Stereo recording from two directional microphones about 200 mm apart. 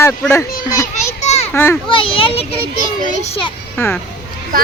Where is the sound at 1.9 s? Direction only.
25° left (ahead or behind).